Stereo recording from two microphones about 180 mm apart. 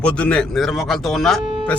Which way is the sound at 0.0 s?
5° left (ahead or behind).